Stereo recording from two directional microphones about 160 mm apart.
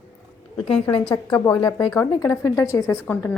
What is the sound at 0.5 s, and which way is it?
Speech, 35° left (ahead or behind).